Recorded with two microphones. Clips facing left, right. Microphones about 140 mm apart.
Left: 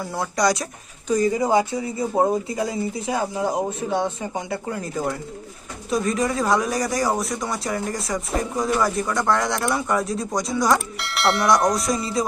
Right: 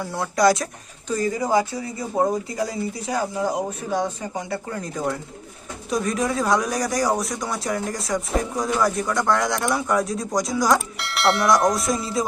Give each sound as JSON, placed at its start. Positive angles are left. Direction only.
{"t": 0.1, "sound": "speech", "side_deg": 0}
{"t": 1.0, "sound": "speech", "side_deg": 15}
{"t": 4.7, "sound": "speech", "side_deg": 5}